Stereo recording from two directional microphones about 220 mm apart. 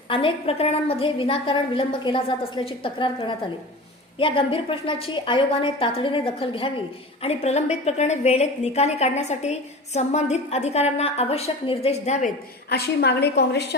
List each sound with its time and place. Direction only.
0.1 s a woman's voice: 25° left (ahead or behind)
12.6 s a woman's voice: 45° left (ahead or behind)